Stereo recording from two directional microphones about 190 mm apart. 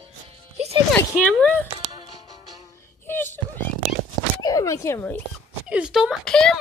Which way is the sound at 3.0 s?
10° left (ahead or behind).